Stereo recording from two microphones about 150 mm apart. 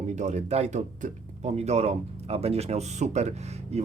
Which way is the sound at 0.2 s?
50° right (ahead or behind).